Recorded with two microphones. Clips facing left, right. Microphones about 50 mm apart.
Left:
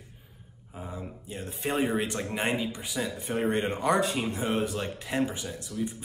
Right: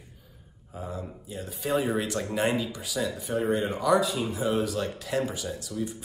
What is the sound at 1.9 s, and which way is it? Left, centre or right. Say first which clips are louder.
Speech: right 1 dB; centre.